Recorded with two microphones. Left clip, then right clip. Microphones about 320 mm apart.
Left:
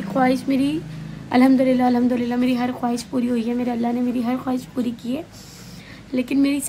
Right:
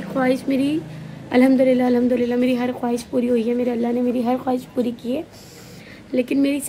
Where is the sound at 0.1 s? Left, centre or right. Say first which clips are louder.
Left 1 dB; centre.